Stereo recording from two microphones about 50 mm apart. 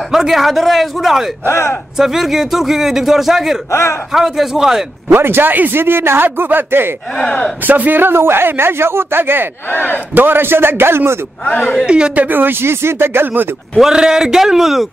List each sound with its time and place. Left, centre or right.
0.1 s a man's voice: centre
1.4 s speech: left
2.0 s a man's voice: centre
3.7 s speech: left
4.1 s a man's voice: centre
5.1 s speech: right
7.2 s speech: centre
7.6 s speech: right
9.7 s speech: left
10.1 s speech: right
11.4 s speech: left
11.8 s speech: centre
12.2 s speech: right
13.7 s a man's voice: centre